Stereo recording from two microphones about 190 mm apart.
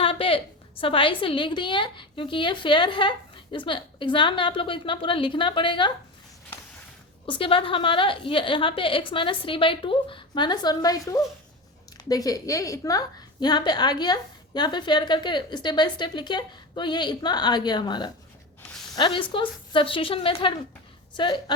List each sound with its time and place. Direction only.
0.0 s a woman's voice: 30° left (ahead or behind)
7.3 s a woman's voice: 25° left (ahead or behind)